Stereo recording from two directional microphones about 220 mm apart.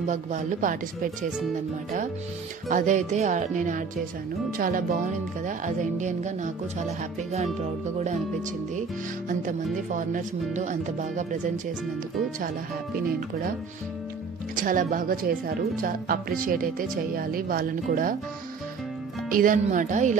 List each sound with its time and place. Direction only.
0.0 s speech: 35° right (ahead or behind)
2.7 s speech: 35° right (ahead or behind)
9.3 s speech: 35° right (ahead or behind)
14.5 s speech: 40° right (ahead or behind)
19.3 s speech: 35° right (ahead or behind)